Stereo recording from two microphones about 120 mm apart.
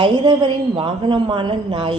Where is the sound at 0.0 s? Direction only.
40° right (ahead or behind).